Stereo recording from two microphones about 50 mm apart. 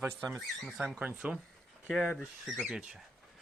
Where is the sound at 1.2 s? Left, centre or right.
Right.